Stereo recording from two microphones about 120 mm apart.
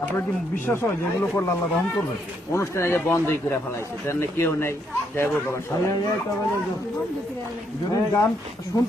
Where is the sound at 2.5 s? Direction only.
25° left (ahead or behind).